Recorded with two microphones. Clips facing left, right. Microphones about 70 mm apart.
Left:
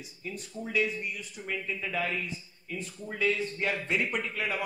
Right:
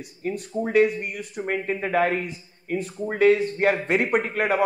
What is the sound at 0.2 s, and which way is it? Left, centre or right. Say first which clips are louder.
A man's voice: right 12 dB; right.